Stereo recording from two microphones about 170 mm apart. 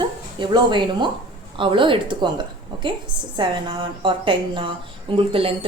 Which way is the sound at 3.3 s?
30° right (ahead or behind).